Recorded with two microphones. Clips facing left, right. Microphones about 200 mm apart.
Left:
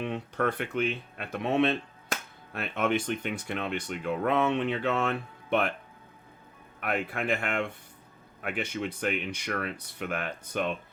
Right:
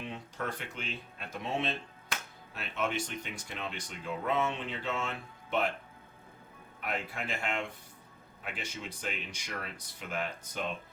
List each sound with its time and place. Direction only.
0.0 s speech: 60° left (ahead or behind)
6.7 s speech: 60° left (ahead or behind)